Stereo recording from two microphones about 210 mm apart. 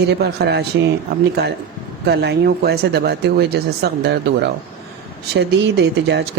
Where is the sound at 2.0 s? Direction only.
55° right (ahead or behind).